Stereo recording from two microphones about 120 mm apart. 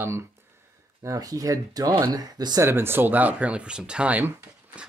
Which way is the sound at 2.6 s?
20° right (ahead or behind).